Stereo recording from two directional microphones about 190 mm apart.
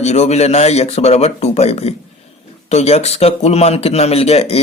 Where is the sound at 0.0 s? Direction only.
35° left (ahead or behind).